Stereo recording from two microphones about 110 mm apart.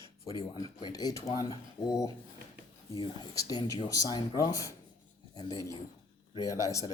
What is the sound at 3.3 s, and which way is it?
Speech, 35° left (ahead or behind).